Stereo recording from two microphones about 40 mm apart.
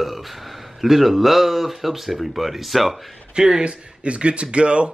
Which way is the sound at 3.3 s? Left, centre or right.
Centre.